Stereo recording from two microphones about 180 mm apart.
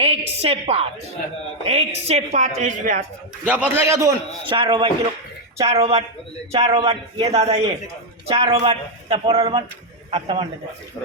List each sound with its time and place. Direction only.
0.0 s a woman's voice: 35° right (ahead or behind)
3.4 s a man's voice: 10° right (ahead or behind)
4.4 s a man's voice: 30° right (ahead or behind)